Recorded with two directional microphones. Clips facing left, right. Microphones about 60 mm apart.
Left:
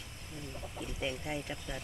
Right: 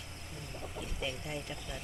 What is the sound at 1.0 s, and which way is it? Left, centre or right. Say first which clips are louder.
Speech: left 3 dB; centre.